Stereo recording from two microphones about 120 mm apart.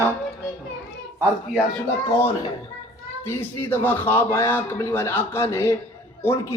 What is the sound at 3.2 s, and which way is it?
A man's voice, 15° left (ahead or behind).